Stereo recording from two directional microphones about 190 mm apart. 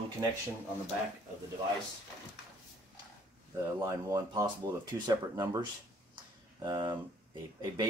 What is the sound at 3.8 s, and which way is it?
Speech, 20° right (ahead or behind).